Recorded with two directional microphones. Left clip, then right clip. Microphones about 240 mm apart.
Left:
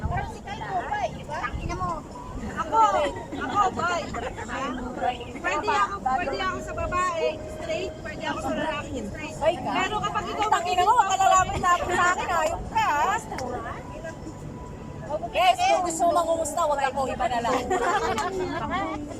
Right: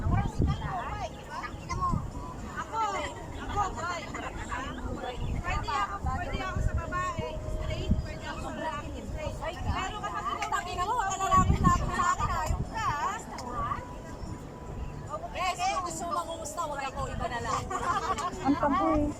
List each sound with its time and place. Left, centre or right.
0.8 s vehicle: left
2.6 s a sound: left
3.6 s vehicle: left
5.5 s vehicle: left
9.4 s a sound: left
15.4 s vehicle: left